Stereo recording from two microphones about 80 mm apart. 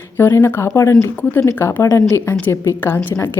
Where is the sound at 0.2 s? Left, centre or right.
Left.